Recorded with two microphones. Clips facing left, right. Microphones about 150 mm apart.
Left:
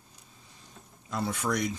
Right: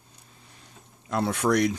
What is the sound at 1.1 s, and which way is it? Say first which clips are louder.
Speech: right 6 dB; 70° right (ahead or behind).